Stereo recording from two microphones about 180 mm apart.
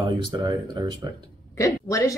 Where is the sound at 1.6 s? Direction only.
15° left (ahead or behind).